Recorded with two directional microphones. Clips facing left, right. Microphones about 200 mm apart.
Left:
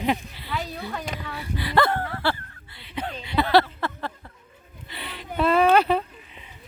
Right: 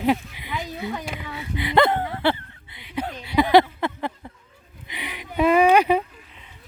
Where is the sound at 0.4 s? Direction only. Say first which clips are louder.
Right 1 dB; 15° right (ahead or behind).